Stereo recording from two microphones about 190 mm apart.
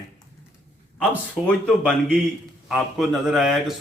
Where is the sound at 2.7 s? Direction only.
Centre (ahead or behind).